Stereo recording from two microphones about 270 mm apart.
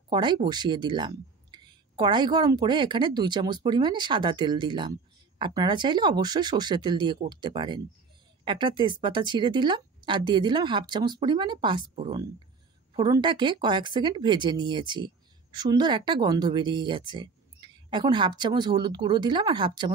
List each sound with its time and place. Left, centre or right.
0.1 s speech: centre